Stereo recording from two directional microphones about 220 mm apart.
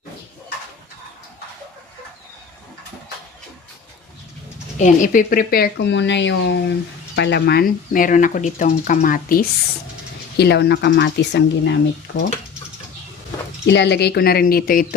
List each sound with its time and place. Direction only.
4.8 s speech: 35° left (ahead or behind); by 12.2 s 50° left (ahead or behind)
13.7 s speech: 50° left (ahead or behind)